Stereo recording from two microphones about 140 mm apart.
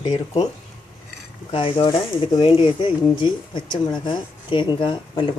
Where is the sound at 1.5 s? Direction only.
40° left (ahead or behind).